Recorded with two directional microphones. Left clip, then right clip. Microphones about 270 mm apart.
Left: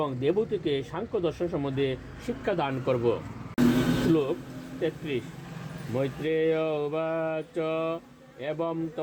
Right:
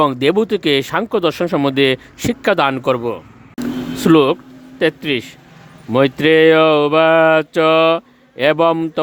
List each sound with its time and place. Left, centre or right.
0.0 s speech: right
4.1 s speech: right